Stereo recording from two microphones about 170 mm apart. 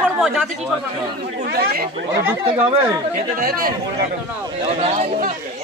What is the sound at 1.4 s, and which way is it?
Speech, 65° right (ahead or behind).